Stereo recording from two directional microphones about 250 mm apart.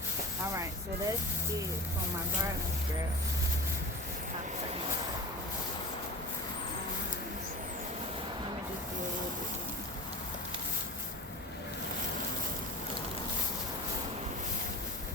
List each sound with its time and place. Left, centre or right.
0.5 s speech: centre